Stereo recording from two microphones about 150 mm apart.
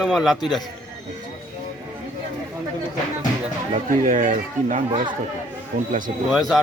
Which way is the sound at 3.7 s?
60° right (ahead or behind).